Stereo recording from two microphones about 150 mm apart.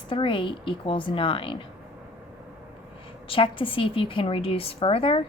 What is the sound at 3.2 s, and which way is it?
A woman's voice, 35° left (ahead or behind).